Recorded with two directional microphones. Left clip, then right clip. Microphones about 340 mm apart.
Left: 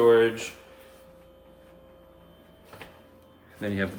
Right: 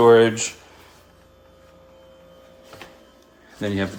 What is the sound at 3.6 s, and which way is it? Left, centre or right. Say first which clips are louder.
Speech: right 5 dB; centre.